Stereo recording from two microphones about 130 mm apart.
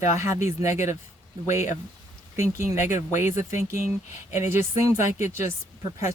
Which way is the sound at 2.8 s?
70° left (ahead or behind).